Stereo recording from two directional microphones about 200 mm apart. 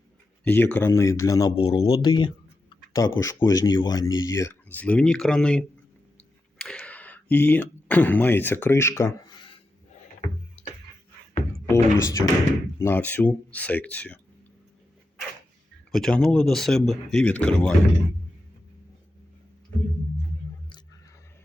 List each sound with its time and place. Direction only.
0.4 s speech: 10° left (ahead or behind)
11.7 s speech: 15° left (ahead or behind)
15.9 s speech: centre (ahead or behind)